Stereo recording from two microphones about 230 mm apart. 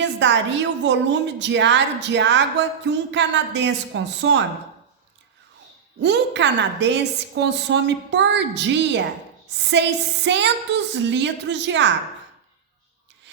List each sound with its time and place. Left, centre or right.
0.0 s a sound: right
0.9 s a woman's voice: right
6.0 s a woman's voice: right